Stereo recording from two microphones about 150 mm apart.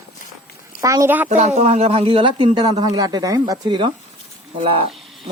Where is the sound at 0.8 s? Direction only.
20° right (ahead or behind).